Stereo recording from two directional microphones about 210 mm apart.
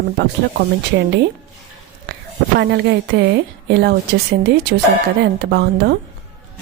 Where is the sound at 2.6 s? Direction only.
55° right (ahead or behind).